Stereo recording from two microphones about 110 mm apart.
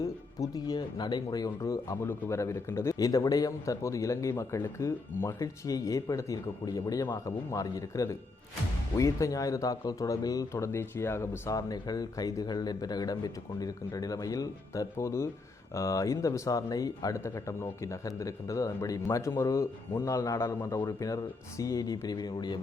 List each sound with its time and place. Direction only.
0.0 s speech: 35° left (ahead or behind)